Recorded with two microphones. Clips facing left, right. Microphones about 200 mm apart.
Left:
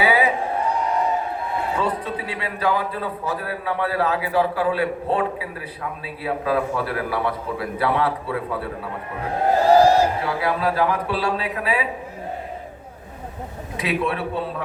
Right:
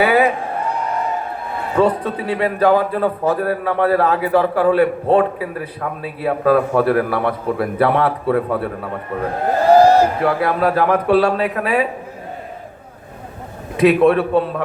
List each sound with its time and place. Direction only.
0.0 s a sound: 55° right (ahead or behind)
1.8 s a man's voice: 55° right (ahead or behind)
13.7 s a man's voice: 55° right (ahead or behind)